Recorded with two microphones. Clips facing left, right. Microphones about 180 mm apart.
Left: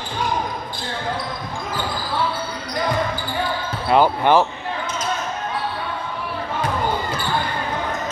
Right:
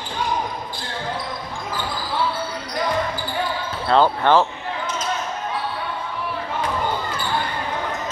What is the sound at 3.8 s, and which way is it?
Speech, 15° left (ahead or behind).